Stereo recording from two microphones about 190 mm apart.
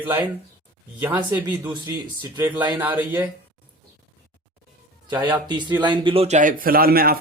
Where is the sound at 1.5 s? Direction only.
25° right (ahead or behind).